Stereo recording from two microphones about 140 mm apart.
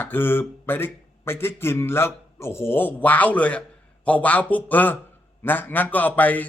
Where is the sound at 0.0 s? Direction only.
15° left (ahead or behind).